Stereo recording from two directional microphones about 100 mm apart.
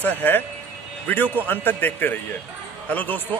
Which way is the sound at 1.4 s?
20° left (ahead or behind).